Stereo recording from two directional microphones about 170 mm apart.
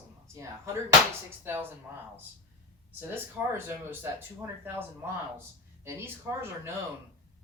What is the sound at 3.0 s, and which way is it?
Speech, 10° right (ahead or behind).